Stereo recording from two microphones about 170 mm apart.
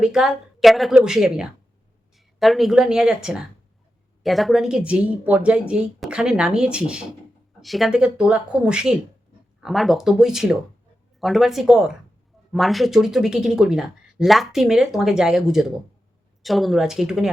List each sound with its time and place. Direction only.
0.0 s speech: 5° right (ahead or behind)